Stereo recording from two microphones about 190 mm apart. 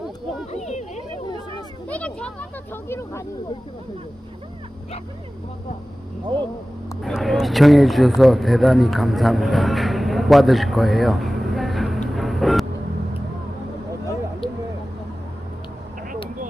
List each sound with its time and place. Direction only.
0.5 s a sound: 40° left (ahead or behind)
1.9 s speech: 5° left (ahead or behind)
6.3 s speech: 25° right (ahead or behind)
7.0 s a man's voice: centre (ahead or behind)